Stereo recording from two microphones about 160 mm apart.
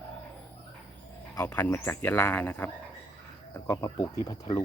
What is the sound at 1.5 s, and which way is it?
Speech, 10° left (ahead or behind).